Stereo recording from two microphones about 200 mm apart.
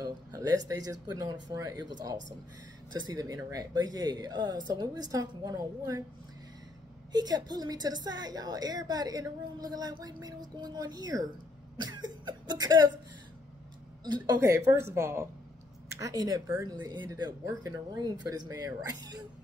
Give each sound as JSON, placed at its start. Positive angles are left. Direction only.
{"t": 0.0, "sound": "a woman's voice", "side_deg": -20}
{"t": 7.1, "sound": "a woman's voice", "side_deg": -20}
{"t": 14.0, "sound": "a woman's voice", "side_deg": -20}